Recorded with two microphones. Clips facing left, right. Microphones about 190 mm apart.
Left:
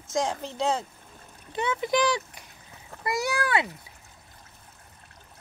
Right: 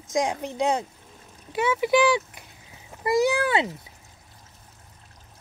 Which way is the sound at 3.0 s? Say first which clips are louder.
Right 7 dB; 20° right (ahead or behind).